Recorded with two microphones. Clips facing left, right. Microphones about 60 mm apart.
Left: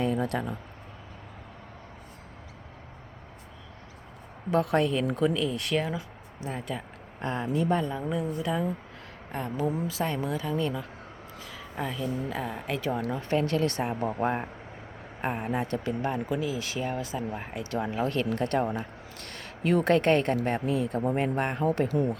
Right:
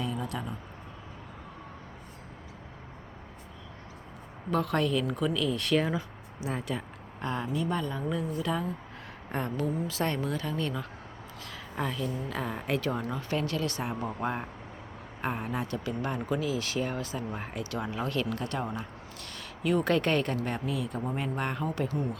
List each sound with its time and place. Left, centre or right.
0.0 s a sound: left
4.7 s speech: left
5.5 s speech: centre
7.2 s speech: left
7.9 s speech: centre
9.3 s speech: centre
10.0 s a woman's voice: centre
13.2 s speech: left
14.2 s speech: left
15.6 s speech: left
16.3 s speech: centre
17.6 s speech: left
18.4 s speech: left
21.7 s speech: left